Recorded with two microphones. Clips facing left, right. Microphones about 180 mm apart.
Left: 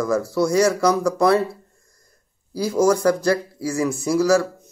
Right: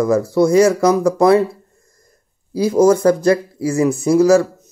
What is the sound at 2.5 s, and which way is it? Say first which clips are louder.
Speech: right 6 dB; 25° right (ahead or behind).